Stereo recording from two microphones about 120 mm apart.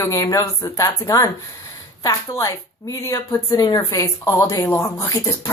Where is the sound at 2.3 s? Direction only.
25° left (ahead or behind).